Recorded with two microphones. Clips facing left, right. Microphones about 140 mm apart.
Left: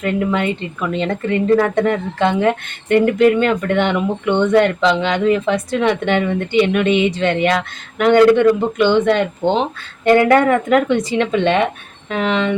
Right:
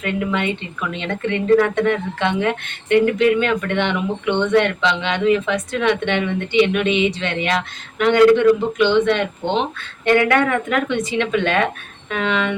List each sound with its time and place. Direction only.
0.0 s speech: 40° left (ahead or behind)